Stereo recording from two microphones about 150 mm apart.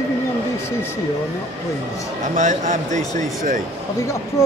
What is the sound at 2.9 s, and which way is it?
Speech, 25° left (ahead or behind).